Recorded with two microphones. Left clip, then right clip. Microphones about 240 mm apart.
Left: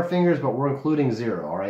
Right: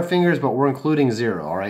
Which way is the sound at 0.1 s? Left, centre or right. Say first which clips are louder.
Right 6 dB; right.